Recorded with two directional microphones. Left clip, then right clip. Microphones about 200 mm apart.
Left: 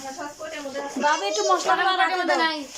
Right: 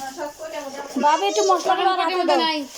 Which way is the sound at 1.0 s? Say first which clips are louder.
Right 4 dB; 10° right (ahead or behind).